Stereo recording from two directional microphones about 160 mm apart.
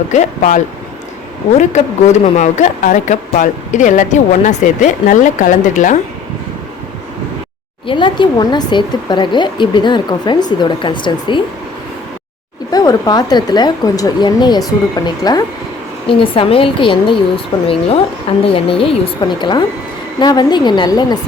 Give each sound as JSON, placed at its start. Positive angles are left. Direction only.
{"t": 0.1, "sound": "a woman's voice", "side_deg": 50}
{"t": 7.9, "sound": "speech", "side_deg": 30}
{"t": 12.7, "sound": "a woman's voice", "side_deg": 25}